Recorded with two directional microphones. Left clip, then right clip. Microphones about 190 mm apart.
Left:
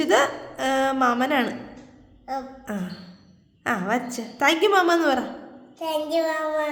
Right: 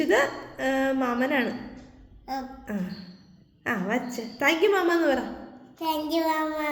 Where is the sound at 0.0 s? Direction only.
30° left (ahead or behind).